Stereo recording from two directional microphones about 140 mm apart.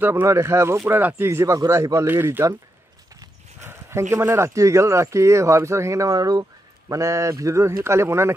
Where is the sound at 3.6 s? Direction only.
20° right (ahead or behind).